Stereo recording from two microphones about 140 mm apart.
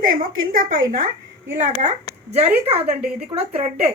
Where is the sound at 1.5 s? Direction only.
60° right (ahead or behind).